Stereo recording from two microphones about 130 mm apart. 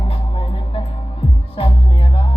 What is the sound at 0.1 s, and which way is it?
Music, 50° left (ahead or behind).